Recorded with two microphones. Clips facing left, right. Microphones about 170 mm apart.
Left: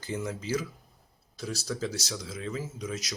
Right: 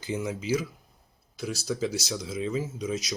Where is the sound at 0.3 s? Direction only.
15° right (ahead or behind).